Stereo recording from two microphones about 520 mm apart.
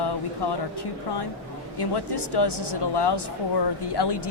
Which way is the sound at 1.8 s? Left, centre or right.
Left.